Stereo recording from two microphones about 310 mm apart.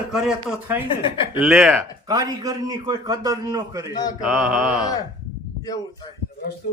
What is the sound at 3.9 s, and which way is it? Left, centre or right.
Speech, centre.